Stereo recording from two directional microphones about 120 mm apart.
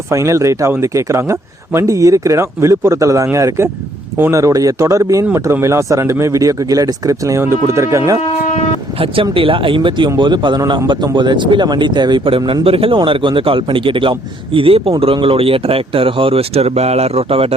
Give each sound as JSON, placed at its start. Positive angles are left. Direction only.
{"t": 0.1, "sound": "speech", "side_deg": -25}
{"t": 9.2, "sound": "a man's voice", "side_deg": -45}